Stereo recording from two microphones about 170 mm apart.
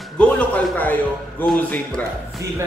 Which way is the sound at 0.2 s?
10° left (ahead or behind).